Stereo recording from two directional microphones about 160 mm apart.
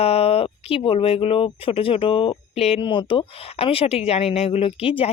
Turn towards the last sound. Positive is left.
turn(degrees=35)  # may be behind; listen again after turning